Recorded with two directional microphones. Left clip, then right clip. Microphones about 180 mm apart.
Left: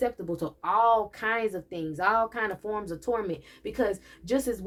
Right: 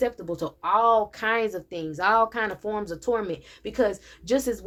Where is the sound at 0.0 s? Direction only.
35° right (ahead or behind).